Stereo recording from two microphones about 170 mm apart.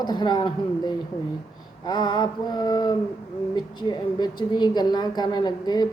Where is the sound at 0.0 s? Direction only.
25° left (ahead or behind).